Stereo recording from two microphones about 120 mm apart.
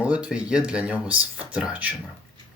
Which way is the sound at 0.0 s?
10° right (ahead or behind).